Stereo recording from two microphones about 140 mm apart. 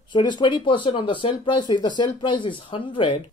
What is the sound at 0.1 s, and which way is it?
Speech, 30° left (ahead or behind).